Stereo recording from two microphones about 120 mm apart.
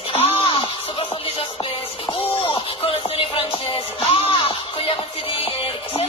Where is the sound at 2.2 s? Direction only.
55° left (ahead or behind).